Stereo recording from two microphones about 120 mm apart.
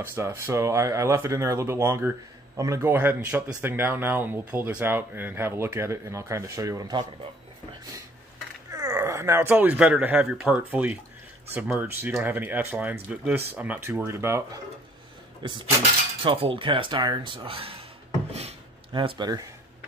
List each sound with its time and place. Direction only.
0.0 s speech: 20° right (ahead or behind)
8.6 s speech: 25° right (ahead or behind)
15.4 s speech: 40° right (ahead or behind)
18.9 s speech: 40° right (ahead or behind)